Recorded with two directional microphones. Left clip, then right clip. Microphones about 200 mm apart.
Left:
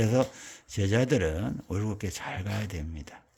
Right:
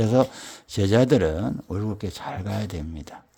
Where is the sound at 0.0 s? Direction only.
15° right (ahead or behind).